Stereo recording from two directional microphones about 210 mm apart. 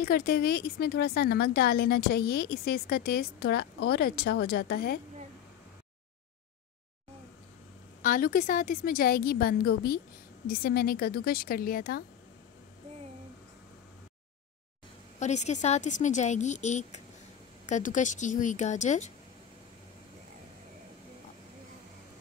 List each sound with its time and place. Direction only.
0.0 s a woman's voice: 45° left (ahead or behind)
8.0 s a woman's voice: 40° left (ahead or behind)
15.1 s speech: 35° left (ahead or behind)